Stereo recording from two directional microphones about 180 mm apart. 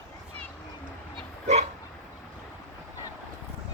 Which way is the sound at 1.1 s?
40° right (ahead or behind).